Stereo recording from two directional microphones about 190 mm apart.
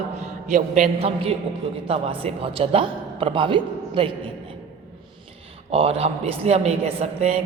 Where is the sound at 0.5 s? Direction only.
40° right (ahead or behind).